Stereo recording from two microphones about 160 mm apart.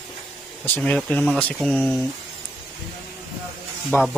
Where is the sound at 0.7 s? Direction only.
10° left (ahead or behind).